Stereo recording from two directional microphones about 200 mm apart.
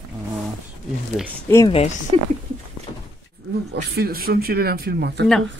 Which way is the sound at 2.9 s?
25° left (ahead or behind).